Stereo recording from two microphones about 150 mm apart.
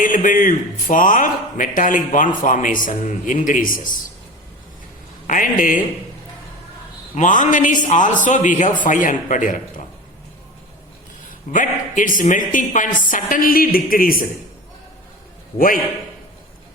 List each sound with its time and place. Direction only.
0.0 s a man's voice: 65° left (ahead or behind)
5.2 s a man's voice: 60° left (ahead or behind)
7.2 s a man's voice: 60° left (ahead or behind)
11.5 s a man's voice: 60° left (ahead or behind)
15.5 s speech: 70° left (ahead or behind)